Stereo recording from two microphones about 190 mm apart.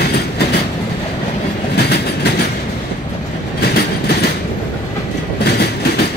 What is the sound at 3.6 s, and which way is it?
Train, 55° left (ahead or behind).